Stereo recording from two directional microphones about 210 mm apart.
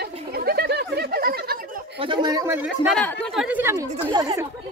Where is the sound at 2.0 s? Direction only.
20° right (ahead or behind).